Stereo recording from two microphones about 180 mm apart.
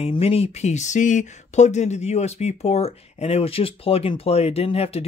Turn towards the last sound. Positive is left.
turn(degrees=35)  # may be behind; listen again after turning